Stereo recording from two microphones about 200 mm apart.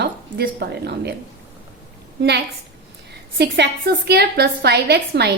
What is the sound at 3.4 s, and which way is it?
A woman's voice, 55° right (ahead or behind).